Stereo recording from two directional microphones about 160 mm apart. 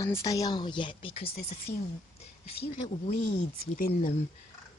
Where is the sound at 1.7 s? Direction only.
10° left (ahead or behind).